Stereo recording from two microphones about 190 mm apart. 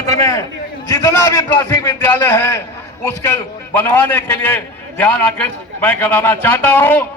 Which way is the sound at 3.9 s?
10° left (ahead or behind).